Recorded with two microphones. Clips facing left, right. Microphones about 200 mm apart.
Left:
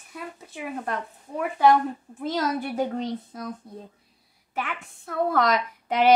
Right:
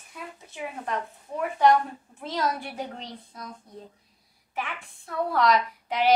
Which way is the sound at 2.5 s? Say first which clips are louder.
Left 8 dB; 50° left (ahead or behind).